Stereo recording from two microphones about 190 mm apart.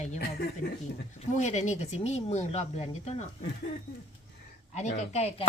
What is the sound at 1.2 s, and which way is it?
Speech, 40° left (ahead or behind).